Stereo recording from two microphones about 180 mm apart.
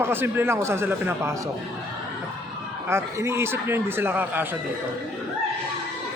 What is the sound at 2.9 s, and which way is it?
A man's voice, 15° right (ahead or behind).